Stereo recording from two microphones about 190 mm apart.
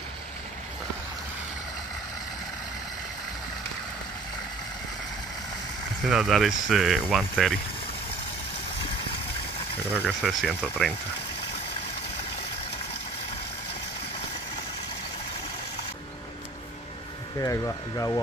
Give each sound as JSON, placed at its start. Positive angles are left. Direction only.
{"t": 6.0, "sound": "speech", "side_deg": 0}
{"t": 10.0, "sound": "speech", "side_deg": 0}
{"t": 17.4, "sound": "speech", "side_deg": 15}